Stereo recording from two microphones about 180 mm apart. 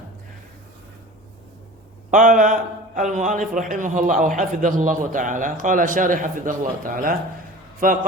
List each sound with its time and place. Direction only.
2.0 s a man's voice: 45° right (ahead or behind)